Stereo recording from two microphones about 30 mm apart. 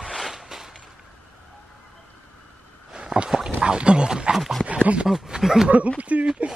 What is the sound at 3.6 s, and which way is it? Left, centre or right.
Speech, right.